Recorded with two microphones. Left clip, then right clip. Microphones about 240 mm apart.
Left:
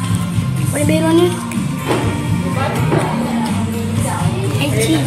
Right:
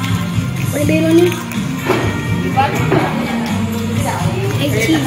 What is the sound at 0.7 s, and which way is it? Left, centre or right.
Speech, centre.